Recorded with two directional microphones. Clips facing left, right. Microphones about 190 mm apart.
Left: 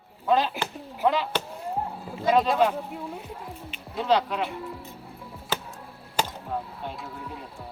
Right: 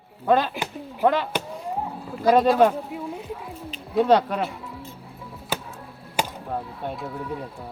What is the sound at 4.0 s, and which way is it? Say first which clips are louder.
Speech: right 5 dB; 50° right (ahead or behind).